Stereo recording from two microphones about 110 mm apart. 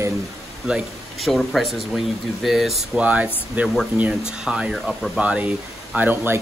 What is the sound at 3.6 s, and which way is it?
Speech, 15° right (ahead or behind).